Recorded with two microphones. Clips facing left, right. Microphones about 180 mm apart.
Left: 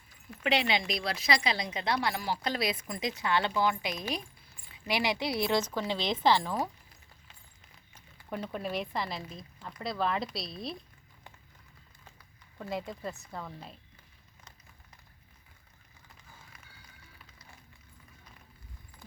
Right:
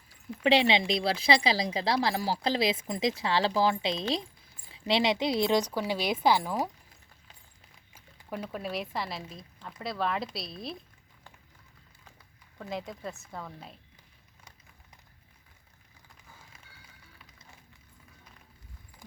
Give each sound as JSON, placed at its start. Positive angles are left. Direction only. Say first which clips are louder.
{"t": 0.4, "sound": "a woman's voice", "louder": "right 5 dB", "side_deg": -30}
{"t": 7.9, "sound": "speech", "louder": "even", "side_deg": -5}
{"t": 12.5, "sound": "speech", "louder": "left 1 dB", "side_deg": 0}